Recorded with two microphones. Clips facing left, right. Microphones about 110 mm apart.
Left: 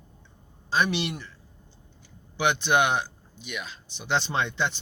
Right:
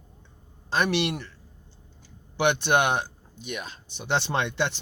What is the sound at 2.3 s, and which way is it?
Speech, 55° right (ahead or behind).